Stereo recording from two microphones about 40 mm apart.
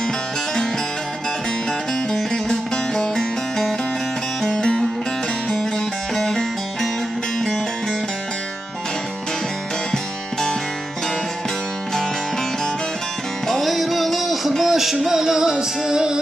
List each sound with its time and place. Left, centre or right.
1.9 s music: centre
4.6 s music: centre
6.1 s music: centre
13.5 s music: centre